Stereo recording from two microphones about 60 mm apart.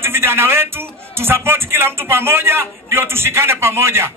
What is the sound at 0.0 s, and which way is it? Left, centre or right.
A man's voice, right.